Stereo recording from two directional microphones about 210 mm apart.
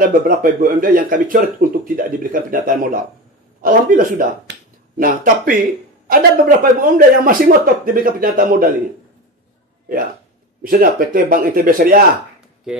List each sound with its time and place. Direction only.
0.0 s speech: 40° right (ahead or behind)
10.6 s speech: 45° right (ahead or behind)